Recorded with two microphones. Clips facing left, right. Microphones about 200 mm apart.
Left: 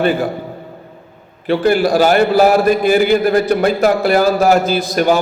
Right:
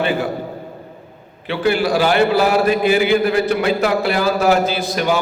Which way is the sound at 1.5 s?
45° left (ahead or behind).